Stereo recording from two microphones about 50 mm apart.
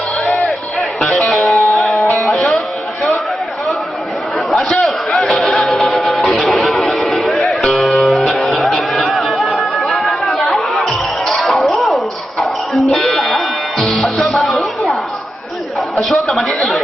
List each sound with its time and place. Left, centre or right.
0.8 s music: centre
2.0 s music: left
4.5 s a sound: centre
5.9 s music: centre
9.8 s chatter: centre
11.3 s music: centre
16.0 s a sound: centre
16.5 s chatter: left